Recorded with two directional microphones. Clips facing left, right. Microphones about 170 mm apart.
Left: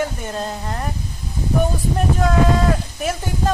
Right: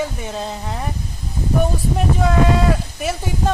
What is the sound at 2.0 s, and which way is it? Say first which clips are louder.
Speech: even; 5° right (ahead or behind).